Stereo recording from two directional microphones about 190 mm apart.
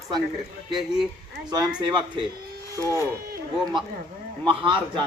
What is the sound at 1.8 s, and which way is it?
Speech, 25° right (ahead or behind).